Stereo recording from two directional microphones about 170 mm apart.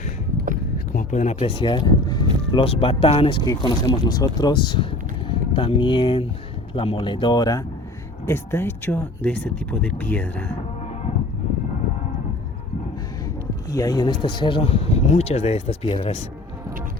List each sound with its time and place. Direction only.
0.9 s speech: 45° left (ahead or behind); by 10.5 s 10° left (ahead or behind)
13.2 s speech: 20° left (ahead or behind); by 16.1 s 35° left (ahead or behind)